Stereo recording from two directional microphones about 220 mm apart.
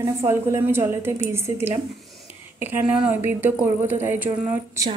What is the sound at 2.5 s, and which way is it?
A woman's voice, 5° right (ahead or behind).